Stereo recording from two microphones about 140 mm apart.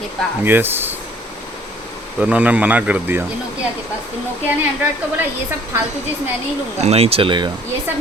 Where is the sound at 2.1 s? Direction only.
10° right (ahead or behind).